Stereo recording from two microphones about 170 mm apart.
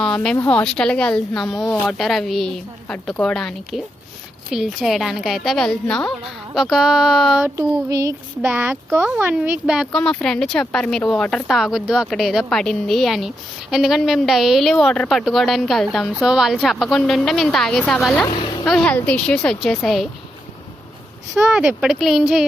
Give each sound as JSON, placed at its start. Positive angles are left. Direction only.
{"t": 0.0, "sound": "speech", "side_deg": 5}
{"t": 7.9, "sound": "child singing", "side_deg": -20}
{"t": 8.4, "sound": "speech", "side_deg": -10}
{"t": 21.4, "sound": "speech", "side_deg": -5}